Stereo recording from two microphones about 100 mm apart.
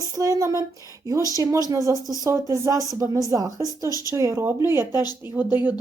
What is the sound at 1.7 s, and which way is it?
Speech, 35° right (ahead or behind).